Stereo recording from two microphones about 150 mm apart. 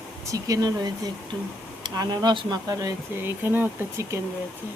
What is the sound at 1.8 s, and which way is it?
Speech, 30° right (ahead or behind).